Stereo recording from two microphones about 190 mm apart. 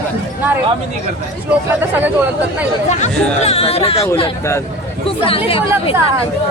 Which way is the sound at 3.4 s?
30° left (ahead or behind).